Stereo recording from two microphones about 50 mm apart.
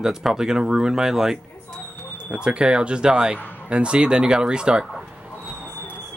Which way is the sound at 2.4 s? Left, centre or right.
Centre.